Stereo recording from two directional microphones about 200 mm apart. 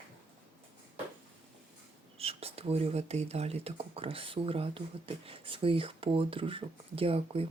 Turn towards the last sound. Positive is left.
turn(degrees=-30)  # may be behind; listen again after turning